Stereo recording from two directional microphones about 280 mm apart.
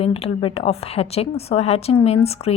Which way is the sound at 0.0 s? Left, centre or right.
Left.